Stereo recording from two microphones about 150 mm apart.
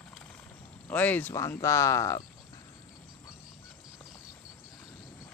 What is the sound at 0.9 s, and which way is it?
Speech, 10° left (ahead or behind).